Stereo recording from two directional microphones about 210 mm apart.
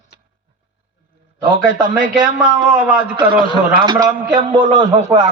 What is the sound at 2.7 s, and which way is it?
Speech, 5° right (ahead or behind).